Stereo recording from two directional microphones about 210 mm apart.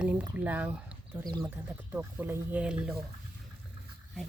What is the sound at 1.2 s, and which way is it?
Speech, 20° right (ahead or behind).